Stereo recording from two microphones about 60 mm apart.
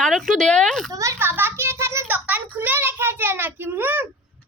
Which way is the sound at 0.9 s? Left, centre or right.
Right.